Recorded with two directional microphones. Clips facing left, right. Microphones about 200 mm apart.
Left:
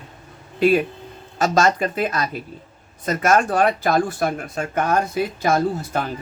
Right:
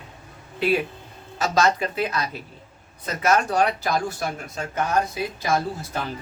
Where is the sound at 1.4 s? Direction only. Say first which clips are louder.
Left 3 dB; 50° left (ahead or behind).